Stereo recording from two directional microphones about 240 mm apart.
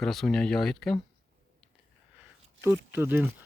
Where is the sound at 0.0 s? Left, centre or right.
Centre.